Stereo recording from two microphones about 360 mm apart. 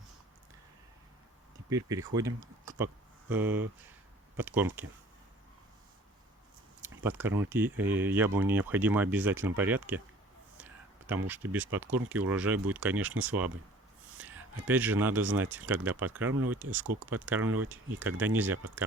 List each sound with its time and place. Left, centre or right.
1.7 s speech: centre
7.0 s speech: centre
10.6 s a sound: centre
11.3 s speech: centre
14.2 s a sound: centre
14.7 s speech: centre
16.8 s speech: right
17.2 s speech: centre